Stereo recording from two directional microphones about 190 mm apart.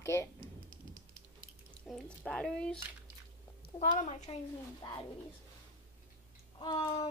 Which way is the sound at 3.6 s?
55° left (ahead or behind).